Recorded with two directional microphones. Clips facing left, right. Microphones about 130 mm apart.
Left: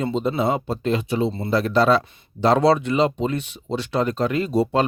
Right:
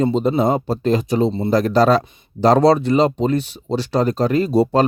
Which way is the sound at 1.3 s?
20° right (ahead or behind).